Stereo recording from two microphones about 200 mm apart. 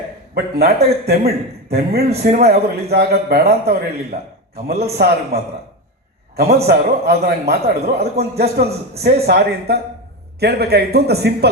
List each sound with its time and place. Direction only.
0.3 s a man's voice: 50° right (ahead or behind)